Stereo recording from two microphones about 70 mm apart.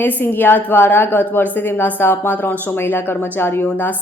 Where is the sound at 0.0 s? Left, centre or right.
Left.